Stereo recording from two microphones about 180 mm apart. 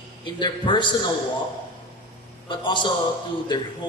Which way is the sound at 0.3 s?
25° left (ahead or behind).